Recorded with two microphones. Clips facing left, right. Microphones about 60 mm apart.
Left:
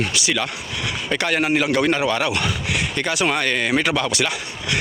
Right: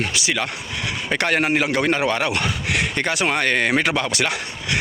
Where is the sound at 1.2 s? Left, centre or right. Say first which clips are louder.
Even; right.